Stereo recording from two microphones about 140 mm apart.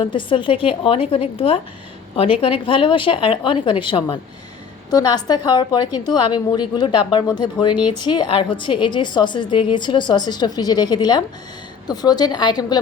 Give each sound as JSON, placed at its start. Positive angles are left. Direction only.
{"t": 0.0, "sound": "a woman's voice", "side_deg": 35}